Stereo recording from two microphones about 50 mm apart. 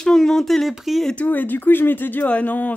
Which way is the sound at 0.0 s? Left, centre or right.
Centre.